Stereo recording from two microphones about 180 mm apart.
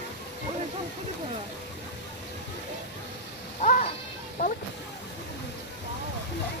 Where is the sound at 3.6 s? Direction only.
40° left (ahead or behind).